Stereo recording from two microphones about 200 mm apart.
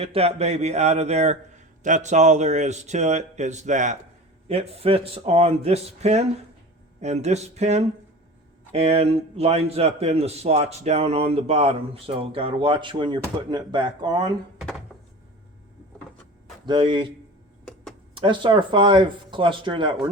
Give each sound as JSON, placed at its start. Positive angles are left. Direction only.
{"t": 0.0, "sound": "a man's voice", "side_deg": -30}
{"t": 16.6, "sound": "a man's voice", "side_deg": -25}
{"t": 18.1, "sound": "a man's voice", "side_deg": -25}